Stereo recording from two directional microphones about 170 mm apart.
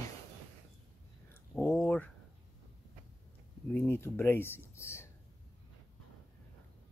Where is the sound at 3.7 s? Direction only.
15° left (ahead or behind).